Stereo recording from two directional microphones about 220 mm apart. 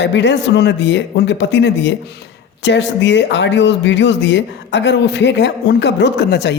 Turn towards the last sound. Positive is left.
turn(degrees=50)  # may be behind; listen again after turning